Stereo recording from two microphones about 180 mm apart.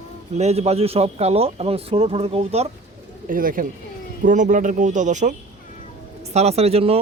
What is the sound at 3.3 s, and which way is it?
Speech, 50° right (ahead or behind).